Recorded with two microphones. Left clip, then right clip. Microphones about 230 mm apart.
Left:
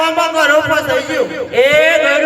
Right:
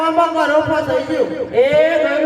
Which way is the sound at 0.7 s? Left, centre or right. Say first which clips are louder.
Left 3 dB; centre.